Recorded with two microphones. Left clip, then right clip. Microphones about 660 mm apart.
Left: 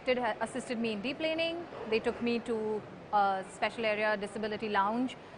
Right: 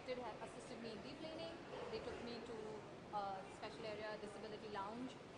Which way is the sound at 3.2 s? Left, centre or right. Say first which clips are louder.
Left 18 dB; left.